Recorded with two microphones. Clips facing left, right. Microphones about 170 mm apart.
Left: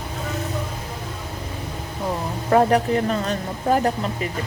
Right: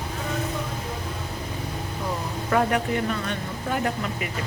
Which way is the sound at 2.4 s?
35° left (ahead or behind).